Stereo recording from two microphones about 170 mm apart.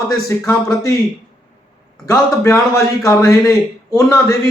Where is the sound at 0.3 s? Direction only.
15° left (ahead or behind).